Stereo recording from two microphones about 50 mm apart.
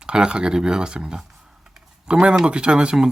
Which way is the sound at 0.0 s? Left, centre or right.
Centre.